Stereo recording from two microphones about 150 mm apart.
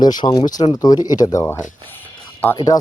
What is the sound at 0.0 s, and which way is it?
Speech, 30° left (ahead or behind).